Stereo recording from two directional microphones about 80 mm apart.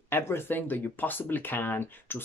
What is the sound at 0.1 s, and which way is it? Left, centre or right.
Speech, left.